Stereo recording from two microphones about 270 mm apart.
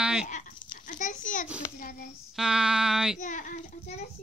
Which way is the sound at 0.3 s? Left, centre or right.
Left.